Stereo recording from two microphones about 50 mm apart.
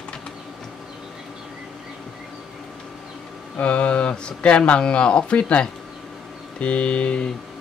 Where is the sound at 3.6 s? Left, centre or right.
Left.